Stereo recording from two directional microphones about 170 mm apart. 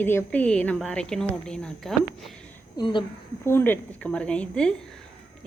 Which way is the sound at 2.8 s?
25° left (ahead or behind).